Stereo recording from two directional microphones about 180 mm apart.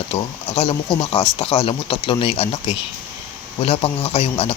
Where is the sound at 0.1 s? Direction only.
35° left (ahead or behind).